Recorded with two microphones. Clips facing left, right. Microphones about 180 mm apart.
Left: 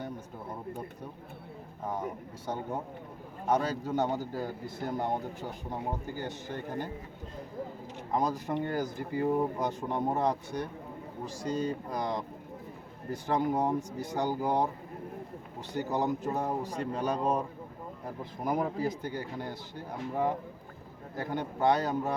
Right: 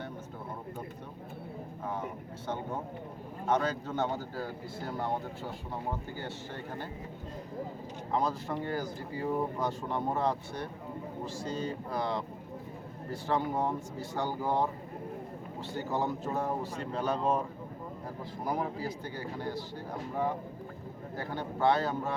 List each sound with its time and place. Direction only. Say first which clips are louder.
3.4 s a man's voice: left 1 dB; 10° left (ahead or behind)
8.1 s a man's voice: left 2 dB; 15° left (ahead or behind)
15.7 s a man's voice: left 3 dB; 15° left (ahead or behind)
21.2 s a man's voice: left 2 dB; 20° left (ahead or behind)